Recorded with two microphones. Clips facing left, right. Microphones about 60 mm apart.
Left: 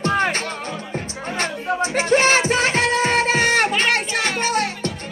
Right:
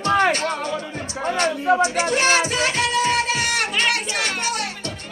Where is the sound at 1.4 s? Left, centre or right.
Left.